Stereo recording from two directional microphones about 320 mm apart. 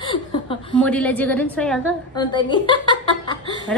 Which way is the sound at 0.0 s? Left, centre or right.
Centre.